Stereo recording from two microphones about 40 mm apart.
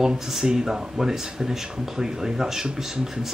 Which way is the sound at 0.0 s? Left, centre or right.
Centre.